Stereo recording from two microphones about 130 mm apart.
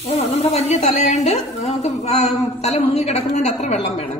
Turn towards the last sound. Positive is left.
turn(degrees=60)  # may be behind; listen again after turning